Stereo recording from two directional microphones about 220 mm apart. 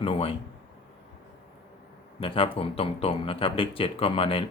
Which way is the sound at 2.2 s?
25° left (ahead or behind).